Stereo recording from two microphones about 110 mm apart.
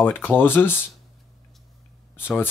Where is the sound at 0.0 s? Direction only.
20° left (ahead or behind).